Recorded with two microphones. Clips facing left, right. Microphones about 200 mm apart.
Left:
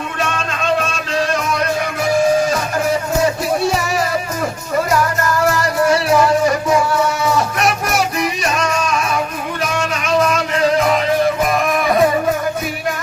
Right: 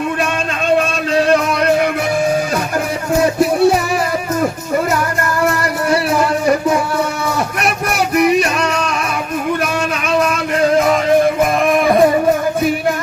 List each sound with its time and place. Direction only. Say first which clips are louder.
3.2 s music: right 9 dB; 55° right (ahead or behind)
5.5 s music: left 3 dB; 60° right (ahead or behind)
7.6 s music: even; 60° right (ahead or behind)